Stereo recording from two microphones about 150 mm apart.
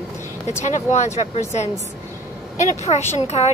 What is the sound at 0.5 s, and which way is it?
A woman's voice, 50° left (ahead or behind).